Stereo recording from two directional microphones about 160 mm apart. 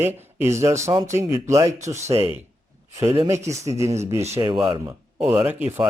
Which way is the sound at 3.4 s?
20° right (ahead or behind).